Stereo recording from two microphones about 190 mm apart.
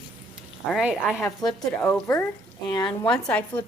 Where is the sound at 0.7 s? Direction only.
5° right (ahead or behind); by 3.1 s 20° left (ahead or behind).